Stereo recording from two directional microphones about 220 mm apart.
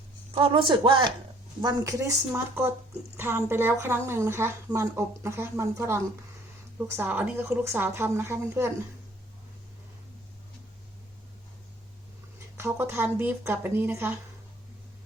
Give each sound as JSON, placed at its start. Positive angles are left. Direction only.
{"t": 0.3, "sound": "a woman's voice", "side_deg": -25}
{"t": 12.5, "sound": "a woman's voice", "side_deg": -10}